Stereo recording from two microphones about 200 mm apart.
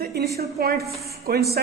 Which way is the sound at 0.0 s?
55° right (ahead or behind).